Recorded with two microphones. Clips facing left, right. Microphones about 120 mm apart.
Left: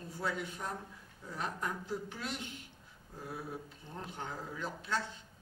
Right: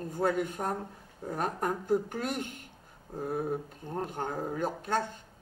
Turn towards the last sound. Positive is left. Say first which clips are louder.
# right 6 dB
turn(degrees=-50)  # may be behind; listen again after turning